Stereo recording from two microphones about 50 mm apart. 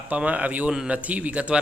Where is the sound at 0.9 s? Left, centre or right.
Right.